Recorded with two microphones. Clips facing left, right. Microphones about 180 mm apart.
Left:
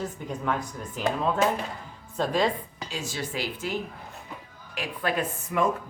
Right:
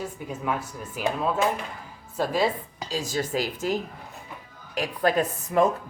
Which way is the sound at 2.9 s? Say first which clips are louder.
Right 6 dB; 40° right (ahead or behind).